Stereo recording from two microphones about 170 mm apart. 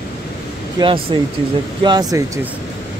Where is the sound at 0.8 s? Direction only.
30° right (ahead or behind).